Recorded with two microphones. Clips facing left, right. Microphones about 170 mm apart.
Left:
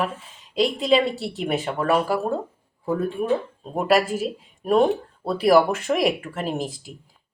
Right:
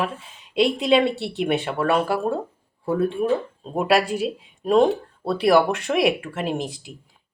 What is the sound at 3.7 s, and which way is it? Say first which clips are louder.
Speech: even; centre (ahead or behind).